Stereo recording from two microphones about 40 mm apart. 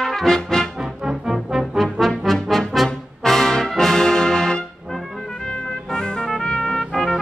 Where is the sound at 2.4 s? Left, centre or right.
Centre.